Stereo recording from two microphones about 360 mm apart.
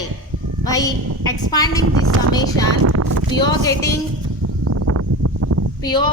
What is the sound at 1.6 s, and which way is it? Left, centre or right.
Speech, right.